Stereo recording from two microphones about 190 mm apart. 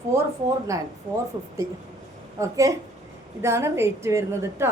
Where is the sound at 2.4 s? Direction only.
15° right (ahead or behind).